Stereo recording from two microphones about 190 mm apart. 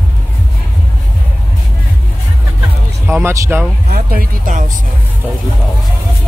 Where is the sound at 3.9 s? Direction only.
50° right (ahead or behind).